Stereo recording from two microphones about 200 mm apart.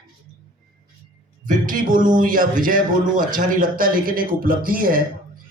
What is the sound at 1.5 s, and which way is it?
A man's voice, 45° right (ahead or behind).